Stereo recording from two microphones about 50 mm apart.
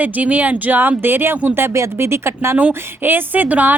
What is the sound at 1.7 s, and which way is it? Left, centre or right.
Speech, right.